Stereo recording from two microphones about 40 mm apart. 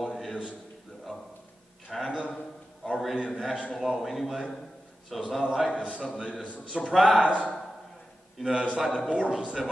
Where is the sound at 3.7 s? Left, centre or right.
Centre.